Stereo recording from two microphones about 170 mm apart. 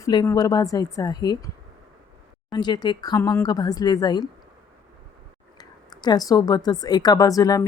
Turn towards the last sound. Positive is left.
turn(degrees=20)  # may be behind; listen again after turning